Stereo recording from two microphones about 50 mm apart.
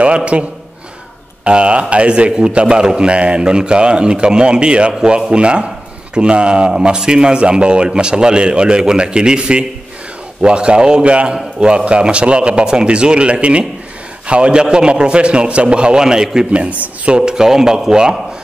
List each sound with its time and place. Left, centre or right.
0.0 s a man's voice: right